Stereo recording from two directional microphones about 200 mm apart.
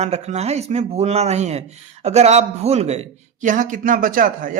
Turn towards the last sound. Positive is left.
turn(degrees=-45)  # may be behind; listen again after turning